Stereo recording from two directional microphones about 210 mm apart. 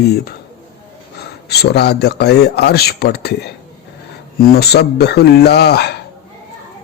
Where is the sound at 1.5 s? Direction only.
50° left (ahead or behind).